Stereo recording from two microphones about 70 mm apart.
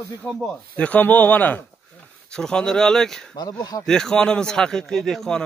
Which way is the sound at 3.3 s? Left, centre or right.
Left.